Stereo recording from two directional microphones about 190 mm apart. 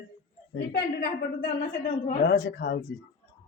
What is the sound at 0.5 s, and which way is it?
Speech, 60° left (ahead or behind).